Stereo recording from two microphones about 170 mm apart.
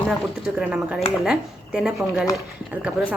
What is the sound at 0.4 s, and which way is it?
Speech, 5° right (ahead or behind).